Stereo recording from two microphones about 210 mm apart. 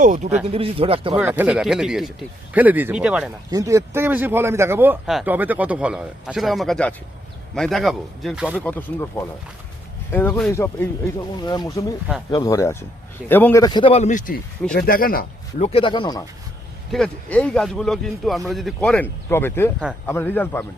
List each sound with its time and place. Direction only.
0.0 s speech: 35° right (ahead or behind)
1.1 s speech: 10° right (ahead or behind)
3.5 s a man's voice: 15° right (ahead or behind)
8.6 s speech: 10° left (ahead or behind)
16.9 s speech: 5° left (ahead or behind)